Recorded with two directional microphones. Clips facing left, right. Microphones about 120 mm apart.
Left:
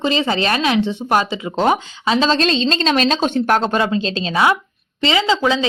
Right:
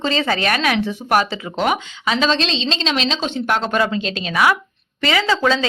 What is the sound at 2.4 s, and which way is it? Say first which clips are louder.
A woman's voice: left 5 dB; 45° left (ahead or behind).